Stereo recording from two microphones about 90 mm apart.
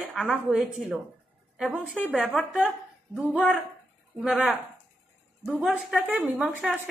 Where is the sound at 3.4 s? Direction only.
15° left (ahead or behind).